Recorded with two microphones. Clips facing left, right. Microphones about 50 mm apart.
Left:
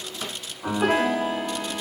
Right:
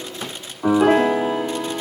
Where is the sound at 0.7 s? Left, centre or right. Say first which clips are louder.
Right 7 dB; centre.